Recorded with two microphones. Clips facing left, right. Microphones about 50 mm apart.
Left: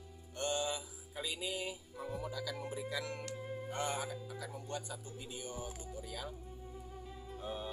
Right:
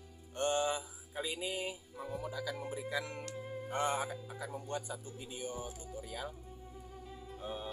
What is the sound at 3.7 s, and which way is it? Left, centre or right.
Speech, centre.